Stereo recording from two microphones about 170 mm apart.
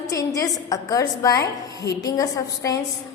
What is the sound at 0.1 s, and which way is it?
A woman's voice, 20° left (ahead or behind).